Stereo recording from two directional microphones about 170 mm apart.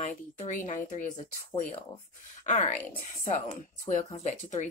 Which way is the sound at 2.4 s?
40° left (ahead or behind).